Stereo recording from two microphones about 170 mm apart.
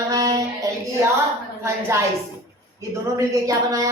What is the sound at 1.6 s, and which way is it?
Speech, 15° right (ahead or behind).